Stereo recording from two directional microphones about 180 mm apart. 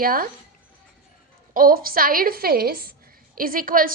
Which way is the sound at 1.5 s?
55° right (ahead or behind).